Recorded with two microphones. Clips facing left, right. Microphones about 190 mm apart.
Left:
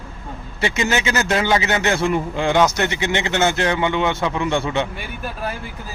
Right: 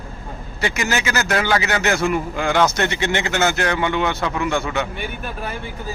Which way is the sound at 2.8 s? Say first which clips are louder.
Even; 15° left (ahead or behind).